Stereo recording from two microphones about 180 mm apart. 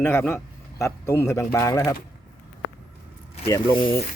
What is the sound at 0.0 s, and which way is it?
A man's voice, 15° left (ahead or behind).